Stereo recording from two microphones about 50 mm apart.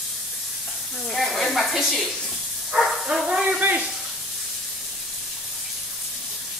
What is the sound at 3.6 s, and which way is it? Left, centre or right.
Speech, right.